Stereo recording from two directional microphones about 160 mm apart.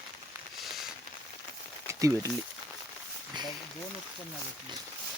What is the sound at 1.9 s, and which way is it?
Speech, 20° right (ahead or behind).